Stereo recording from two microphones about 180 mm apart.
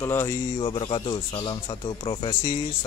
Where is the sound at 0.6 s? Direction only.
30° left (ahead or behind).